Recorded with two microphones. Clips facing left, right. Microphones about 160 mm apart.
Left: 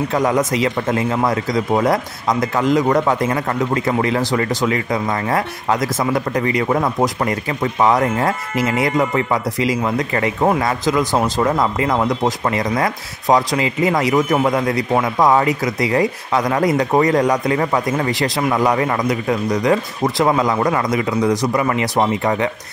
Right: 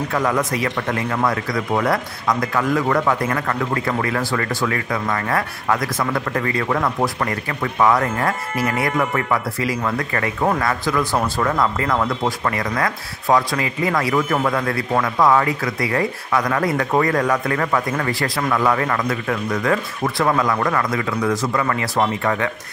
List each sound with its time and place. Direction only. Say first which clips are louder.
0.1 s speech: left 3 dB; 20° left (ahead or behind)